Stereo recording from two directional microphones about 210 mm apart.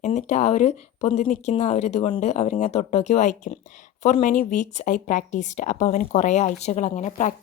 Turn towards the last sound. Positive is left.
turn(degrees=35)  # may be behind; listen again after turning